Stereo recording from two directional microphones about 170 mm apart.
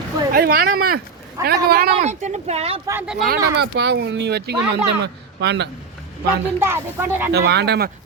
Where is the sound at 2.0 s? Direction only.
45° right (ahead or behind).